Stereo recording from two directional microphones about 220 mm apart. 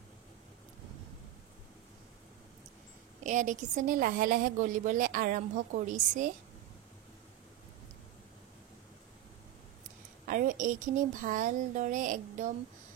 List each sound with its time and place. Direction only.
3.3 s a woman's voice: 35° right (ahead or behind)
10.2 s a woman's voice: 35° right (ahead or behind)